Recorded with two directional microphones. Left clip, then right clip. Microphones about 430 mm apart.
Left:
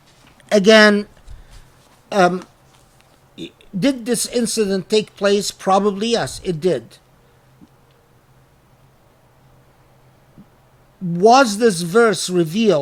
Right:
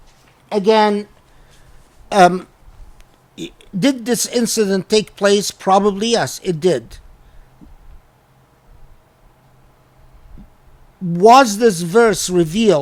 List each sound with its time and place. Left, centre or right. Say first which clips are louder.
0.4 s speech: left 3 dB; centre
2.0 s speech: right 4 dB; centre
11.1 s speech: right 3 dB; centre